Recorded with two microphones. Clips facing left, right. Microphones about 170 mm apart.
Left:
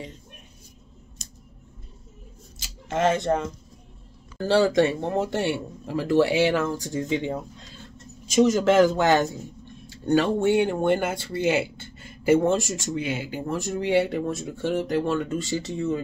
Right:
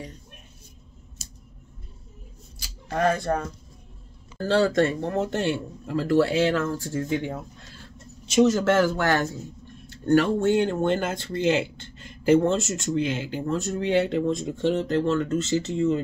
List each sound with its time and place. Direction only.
2.6 s speech: 20° left (ahead or behind)
8.5 s speech: 15° left (ahead or behind)